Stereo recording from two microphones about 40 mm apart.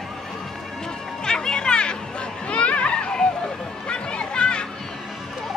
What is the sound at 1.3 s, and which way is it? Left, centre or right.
Music, centre.